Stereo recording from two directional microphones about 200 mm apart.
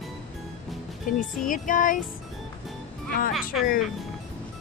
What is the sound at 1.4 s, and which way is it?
Music, 40° left (ahead or behind).